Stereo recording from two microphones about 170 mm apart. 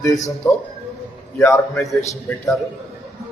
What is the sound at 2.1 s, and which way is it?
Speech, 15° left (ahead or behind).